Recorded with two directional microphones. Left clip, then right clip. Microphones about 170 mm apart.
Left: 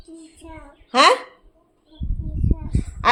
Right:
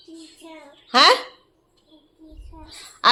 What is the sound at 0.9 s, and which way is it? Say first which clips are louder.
Speech: even; centre (ahead or behind).